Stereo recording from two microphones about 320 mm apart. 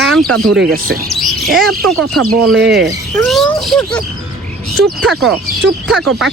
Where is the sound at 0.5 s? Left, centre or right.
Right.